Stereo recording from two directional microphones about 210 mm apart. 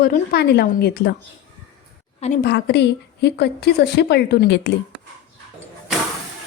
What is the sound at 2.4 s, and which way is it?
A woman's voice, 55° left (ahead or behind).